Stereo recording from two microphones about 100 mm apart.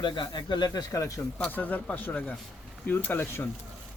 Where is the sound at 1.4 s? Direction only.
15° left (ahead or behind).